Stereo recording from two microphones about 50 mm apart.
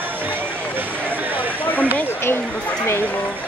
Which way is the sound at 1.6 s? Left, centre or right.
Left.